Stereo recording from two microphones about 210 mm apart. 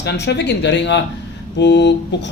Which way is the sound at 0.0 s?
55° left (ahead or behind).